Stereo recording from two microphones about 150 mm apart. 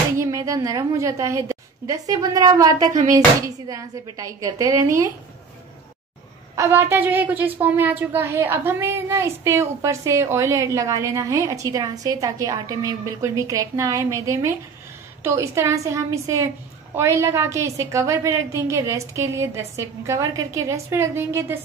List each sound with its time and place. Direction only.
0.2 s a woman's voice: 20° right (ahead or behind)
6.5 s a woman's voice: 20° right (ahead or behind)